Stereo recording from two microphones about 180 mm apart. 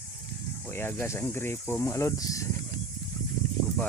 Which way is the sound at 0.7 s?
15° left (ahead or behind).